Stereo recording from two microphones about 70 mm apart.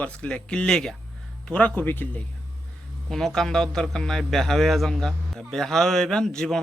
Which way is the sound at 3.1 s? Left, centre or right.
Centre.